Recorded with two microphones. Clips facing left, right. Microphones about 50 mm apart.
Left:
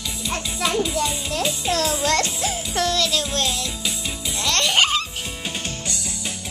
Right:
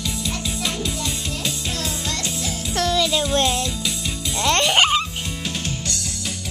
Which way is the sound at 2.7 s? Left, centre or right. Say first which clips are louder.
Right 3 dB; centre.